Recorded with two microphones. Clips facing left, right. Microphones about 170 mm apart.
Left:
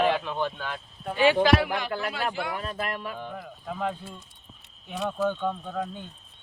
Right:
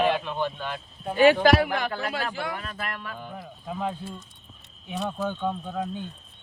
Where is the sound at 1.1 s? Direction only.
45° right (ahead or behind).